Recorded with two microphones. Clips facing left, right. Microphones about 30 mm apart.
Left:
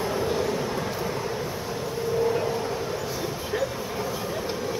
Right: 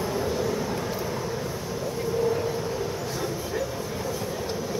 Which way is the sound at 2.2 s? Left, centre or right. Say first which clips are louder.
Left 1 dB; centre.